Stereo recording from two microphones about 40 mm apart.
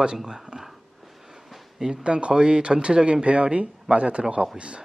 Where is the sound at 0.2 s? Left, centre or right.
Centre.